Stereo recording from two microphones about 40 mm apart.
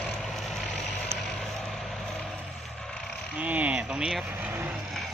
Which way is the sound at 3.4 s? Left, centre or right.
Right.